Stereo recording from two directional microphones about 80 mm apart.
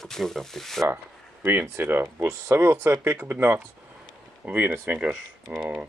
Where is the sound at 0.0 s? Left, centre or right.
Centre.